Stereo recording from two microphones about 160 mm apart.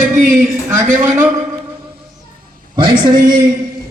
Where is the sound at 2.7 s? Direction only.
30° right (ahead or behind).